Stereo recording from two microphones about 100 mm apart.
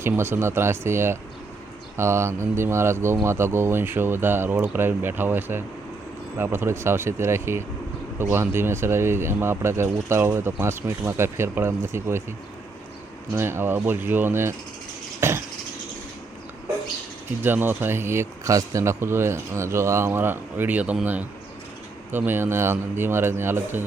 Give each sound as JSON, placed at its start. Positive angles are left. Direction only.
{"t": 0.0, "sound": "speech", "side_deg": -25}
{"t": 13.3, "sound": "speech", "side_deg": -25}
{"t": 15.2, "sound": "a sound", "side_deg": -25}
{"t": 17.4, "sound": "speech", "side_deg": -20}